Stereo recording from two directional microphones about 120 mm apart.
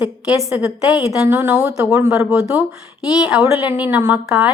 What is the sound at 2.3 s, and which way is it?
A woman's voice, 5° right (ahead or behind).